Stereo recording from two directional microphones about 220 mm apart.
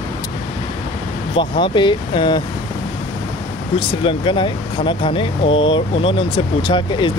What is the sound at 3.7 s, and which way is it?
Speech, 25° left (ahead or behind).